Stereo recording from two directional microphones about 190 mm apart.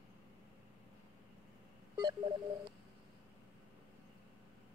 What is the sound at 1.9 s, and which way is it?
Telephone dialing, 25° right (ahead or behind).